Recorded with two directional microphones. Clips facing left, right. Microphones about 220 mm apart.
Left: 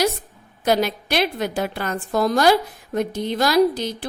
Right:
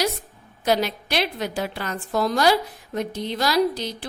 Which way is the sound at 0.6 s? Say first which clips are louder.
Left 2 dB; 50° left (ahead or behind).